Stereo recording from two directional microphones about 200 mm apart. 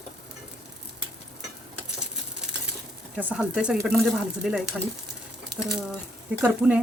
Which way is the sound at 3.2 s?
5° right (ahead or behind).